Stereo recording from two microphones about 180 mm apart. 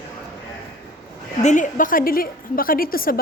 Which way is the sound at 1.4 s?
45° left (ahead or behind).